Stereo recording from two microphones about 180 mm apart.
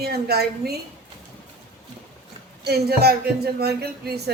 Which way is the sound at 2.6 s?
60° right (ahead or behind).